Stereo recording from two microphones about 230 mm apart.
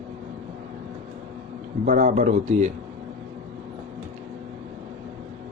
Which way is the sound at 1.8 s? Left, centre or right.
Right.